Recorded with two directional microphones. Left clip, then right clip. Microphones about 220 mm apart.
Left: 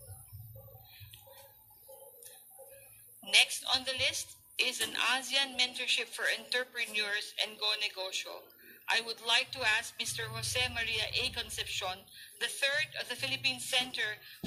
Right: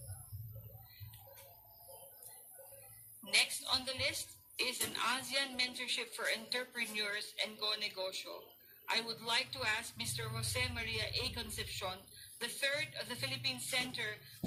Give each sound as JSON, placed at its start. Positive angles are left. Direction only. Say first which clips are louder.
{"t": 3.3, "sound": "speech", "louder": "left 6 dB", "side_deg": 25}